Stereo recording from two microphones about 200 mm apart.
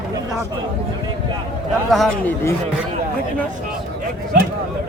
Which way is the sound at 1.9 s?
Centre (ahead or behind).